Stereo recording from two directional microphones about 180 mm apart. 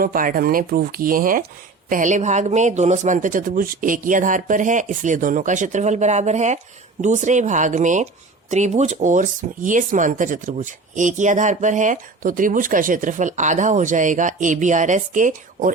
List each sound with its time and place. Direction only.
0.0 s speech: 50° right (ahead or behind)